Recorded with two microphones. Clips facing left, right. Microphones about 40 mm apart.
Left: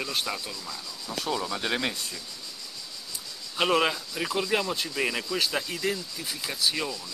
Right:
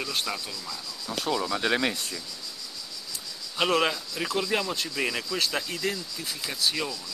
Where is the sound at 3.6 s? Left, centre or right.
Centre.